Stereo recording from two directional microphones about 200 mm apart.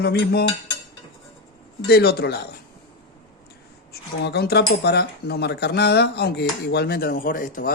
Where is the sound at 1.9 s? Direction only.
55° left (ahead or behind).